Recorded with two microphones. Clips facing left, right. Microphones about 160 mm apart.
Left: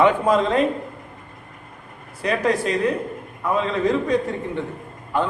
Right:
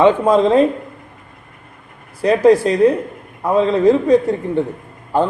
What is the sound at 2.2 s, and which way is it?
Speech, 35° right (ahead or behind).